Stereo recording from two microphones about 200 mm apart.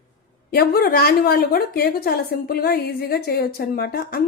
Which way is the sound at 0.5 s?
50° left (ahead or behind).